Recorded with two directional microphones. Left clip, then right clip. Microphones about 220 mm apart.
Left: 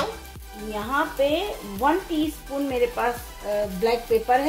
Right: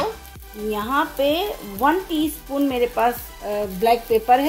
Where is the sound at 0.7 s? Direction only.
45° right (ahead or behind).